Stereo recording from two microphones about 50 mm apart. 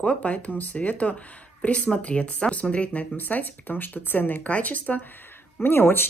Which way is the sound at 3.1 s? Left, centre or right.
Left.